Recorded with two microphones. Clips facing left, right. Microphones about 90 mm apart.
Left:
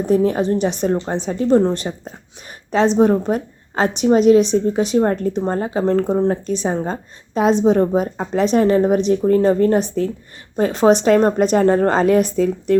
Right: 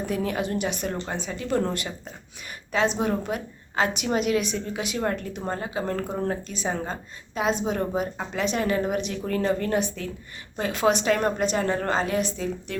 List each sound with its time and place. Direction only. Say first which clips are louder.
0.0 s a woman's voice: left 11 dB; 35° left (ahead or behind)